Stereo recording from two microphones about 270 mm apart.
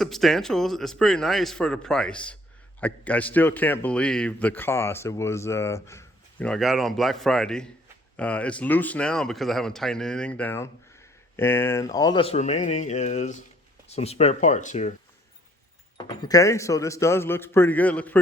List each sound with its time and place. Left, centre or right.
0.0 s a man's voice: centre; by 14.9 s left
16.0 s speech: centre